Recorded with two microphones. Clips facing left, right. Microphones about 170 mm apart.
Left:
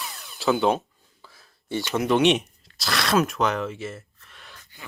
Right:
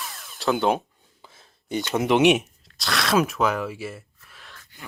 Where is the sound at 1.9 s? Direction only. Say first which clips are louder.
Right 2 dB; 20° right (ahead or behind).